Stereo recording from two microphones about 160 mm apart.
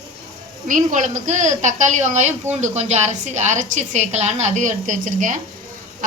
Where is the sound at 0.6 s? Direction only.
55° right (ahead or behind).